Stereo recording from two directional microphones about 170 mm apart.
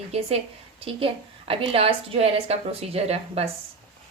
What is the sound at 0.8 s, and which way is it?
A woman's voice, 35° right (ahead or behind).